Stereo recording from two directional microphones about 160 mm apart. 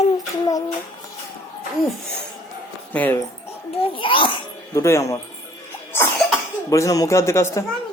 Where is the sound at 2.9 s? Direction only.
10° left (ahead or behind).